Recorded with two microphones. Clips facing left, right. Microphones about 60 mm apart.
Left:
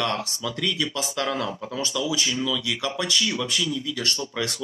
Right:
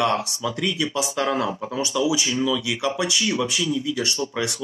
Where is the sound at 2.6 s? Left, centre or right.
Centre.